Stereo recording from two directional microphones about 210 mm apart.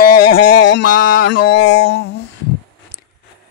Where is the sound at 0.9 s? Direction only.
40° left (ahead or behind).